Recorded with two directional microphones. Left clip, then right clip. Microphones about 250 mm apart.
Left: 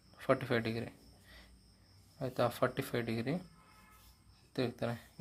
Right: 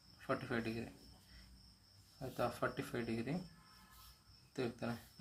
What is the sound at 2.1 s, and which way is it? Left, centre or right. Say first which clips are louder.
Speech: left 7 dB; left.